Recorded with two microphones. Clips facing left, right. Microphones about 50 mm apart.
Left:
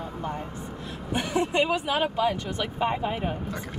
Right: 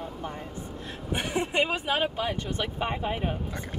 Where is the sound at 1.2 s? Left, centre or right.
Right.